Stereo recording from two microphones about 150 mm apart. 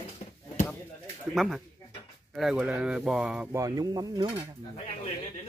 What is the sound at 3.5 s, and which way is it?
Speech, 25° right (ahead or behind).